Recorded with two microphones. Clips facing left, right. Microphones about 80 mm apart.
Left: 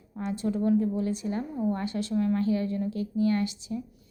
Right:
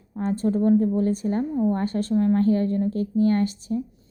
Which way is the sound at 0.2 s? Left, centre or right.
Right.